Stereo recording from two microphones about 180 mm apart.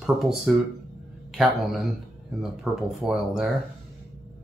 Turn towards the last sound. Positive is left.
turn(degrees=0)  # may be behind; listen again after turning